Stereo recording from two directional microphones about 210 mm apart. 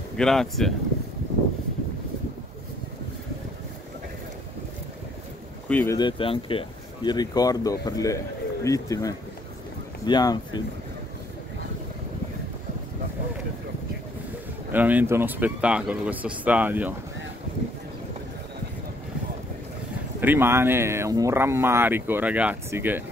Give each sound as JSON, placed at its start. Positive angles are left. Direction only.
{"t": 0.2, "sound": "speech", "side_deg": 0}
{"t": 5.7, "sound": "speech", "side_deg": 10}
{"t": 5.9, "sound": "speech", "side_deg": 25}
{"t": 14.7, "sound": "speech", "side_deg": -10}
{"t": 20.2, "sound": "speech", "side_deg": -10}